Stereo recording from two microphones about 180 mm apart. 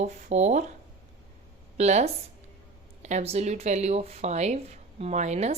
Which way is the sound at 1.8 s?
40° right (ahead or behind).